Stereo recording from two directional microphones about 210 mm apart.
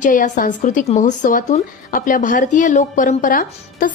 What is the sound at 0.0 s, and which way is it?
A woman's voice, 40° left (ahead or behind).